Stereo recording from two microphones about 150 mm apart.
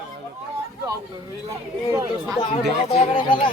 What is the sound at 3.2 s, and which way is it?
Speech, 30° left (ahead or behind).